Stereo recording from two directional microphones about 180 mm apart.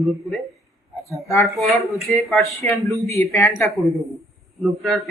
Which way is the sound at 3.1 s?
15° left (ahead or behind).